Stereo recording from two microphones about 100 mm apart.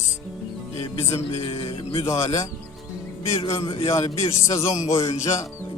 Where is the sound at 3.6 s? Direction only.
70° left (ahead or behind).